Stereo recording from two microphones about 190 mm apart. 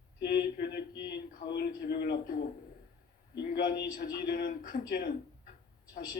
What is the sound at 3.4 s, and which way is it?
Speech, 50° left (ahead or behind).